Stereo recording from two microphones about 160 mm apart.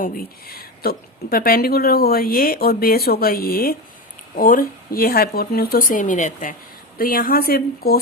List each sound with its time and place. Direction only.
0.0 s speech: 70° left (ahead or behind); by 6.6 s 55° left (ahead or behind)
7.0 s speech: 65° left (ahead or behind)